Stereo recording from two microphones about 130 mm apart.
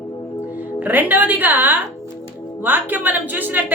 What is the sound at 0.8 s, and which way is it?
A woman's voice, 15° right (ahead or behind).